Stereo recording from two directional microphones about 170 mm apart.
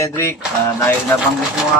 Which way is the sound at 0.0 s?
15° left (ahead or behind).